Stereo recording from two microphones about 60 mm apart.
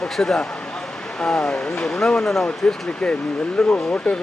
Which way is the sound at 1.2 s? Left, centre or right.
Centre.